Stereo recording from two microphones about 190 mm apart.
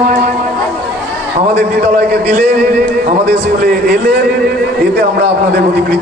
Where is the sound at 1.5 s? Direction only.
55° right (ahead or behind).